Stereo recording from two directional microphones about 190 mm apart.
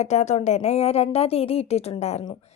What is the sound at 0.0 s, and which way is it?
A woman's voice, 40° left (ahead or behind).